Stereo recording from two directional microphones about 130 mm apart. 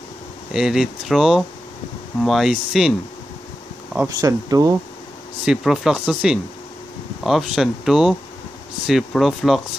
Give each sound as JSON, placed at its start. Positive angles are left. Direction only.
{"t": 0.5, "sound": "speech", "side_deg": -5}
{"t": 4.2, "sound": "speech", "side_deg": -30}
{"t": 5.4, "sound": "speech", "side_deg": -5}